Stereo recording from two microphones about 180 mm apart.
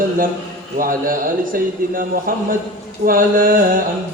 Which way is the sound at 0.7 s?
50° right (ahead or behind).